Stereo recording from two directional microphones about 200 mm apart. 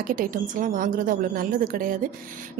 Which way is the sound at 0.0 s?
45° right (ahead or behind).